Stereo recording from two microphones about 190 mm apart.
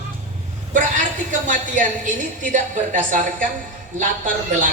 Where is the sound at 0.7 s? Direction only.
40° right (ahead or behind).